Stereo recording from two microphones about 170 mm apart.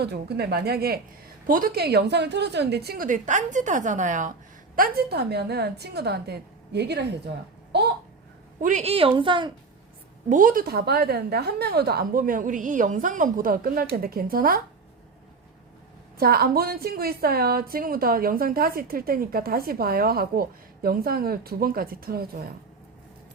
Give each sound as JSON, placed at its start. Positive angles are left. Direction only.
{"t": 0.0, "sound": "a woman's voice", "side_deg": -70}
{"t": 1.5, "sound": "a woman's voice", "side_deg": -55}
{"t": 8.6, "sound": "a woman's voice", "side_deg": -40}
{"t": 10.2, "sound": "a woman's voice", "side_deg": -50}
{"t": 16.1, "sound": "a woman's voice", "side_deg": -60}